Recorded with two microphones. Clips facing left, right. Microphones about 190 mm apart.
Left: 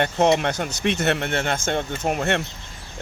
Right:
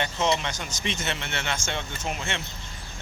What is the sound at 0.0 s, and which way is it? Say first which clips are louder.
Speech: left 7 dB; 55° left (ahead or behind).